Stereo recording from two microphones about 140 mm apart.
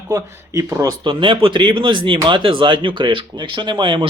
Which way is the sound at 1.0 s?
35° right (ahead or behind).